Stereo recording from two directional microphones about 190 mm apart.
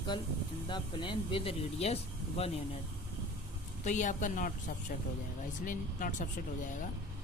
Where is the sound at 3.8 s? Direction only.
40° left (ahead or behind).